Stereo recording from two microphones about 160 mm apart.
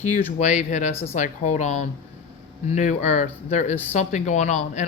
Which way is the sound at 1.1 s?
50° left (ahead or behind).